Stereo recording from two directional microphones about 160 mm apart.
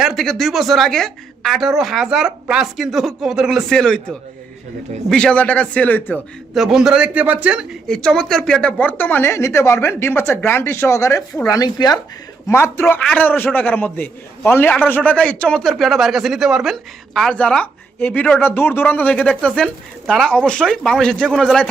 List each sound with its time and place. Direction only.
0.0 s a woman's voice: centre (ahead or behind)
6.5 s a woman's voice: centre (ahead or behind)
7.9 s a man's voice: 5° left (ahead or behind)